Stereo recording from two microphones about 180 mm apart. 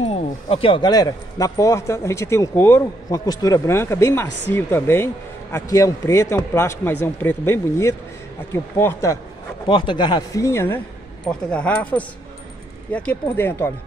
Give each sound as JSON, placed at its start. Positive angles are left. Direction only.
{"t": 0.0, "sound": "speech", "side_deg": 35}
{"t": 9.7, "sound": "speech", "side_deg": 25}